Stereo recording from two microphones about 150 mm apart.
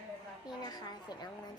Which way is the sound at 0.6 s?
25° left (ahead or behind).